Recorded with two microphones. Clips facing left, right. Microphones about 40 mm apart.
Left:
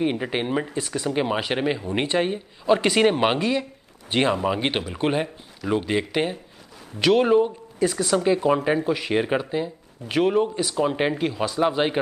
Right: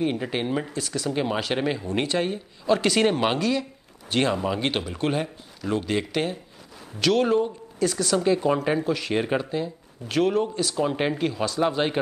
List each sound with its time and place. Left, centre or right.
0.0 s speech: centre